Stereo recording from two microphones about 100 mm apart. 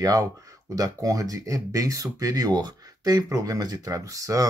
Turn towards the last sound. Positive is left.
turn(degrees=-35)  # may be behind; listen again after turning